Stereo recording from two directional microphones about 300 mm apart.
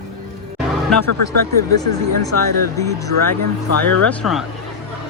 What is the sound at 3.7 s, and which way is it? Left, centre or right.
Speech, left.